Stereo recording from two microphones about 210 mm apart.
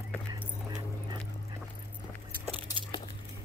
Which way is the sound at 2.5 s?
25° left (ahead or behind).